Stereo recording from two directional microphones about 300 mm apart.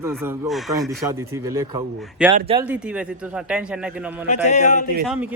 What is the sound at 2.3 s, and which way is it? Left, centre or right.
Speech, centre.